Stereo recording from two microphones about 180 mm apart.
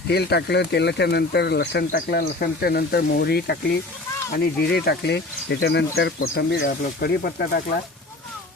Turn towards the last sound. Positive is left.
turn(degrees=60)  # may be behind; listen again after turning